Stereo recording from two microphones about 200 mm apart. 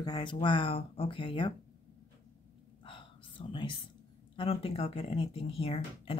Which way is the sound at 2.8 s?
25° left (ahead or behind).